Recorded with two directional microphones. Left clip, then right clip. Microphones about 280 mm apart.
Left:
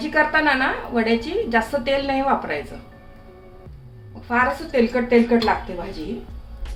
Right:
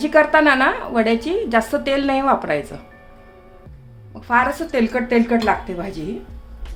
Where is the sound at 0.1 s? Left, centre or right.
Right.